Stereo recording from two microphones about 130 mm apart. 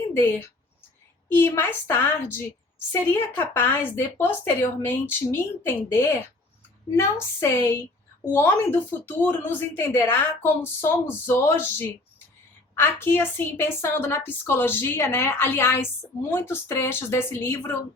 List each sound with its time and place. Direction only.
1.3 s a woman's voice: 15° left (ahead or behind)